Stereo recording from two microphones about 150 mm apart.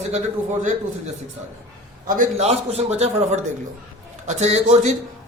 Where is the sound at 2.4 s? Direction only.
45° right (ahead or behind).